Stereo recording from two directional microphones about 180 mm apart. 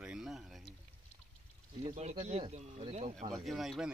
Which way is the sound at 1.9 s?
40° right (ahead or behind).